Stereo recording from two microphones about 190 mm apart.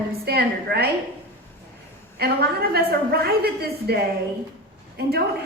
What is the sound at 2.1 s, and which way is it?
A woman's voice, 55° right (ahead or behind).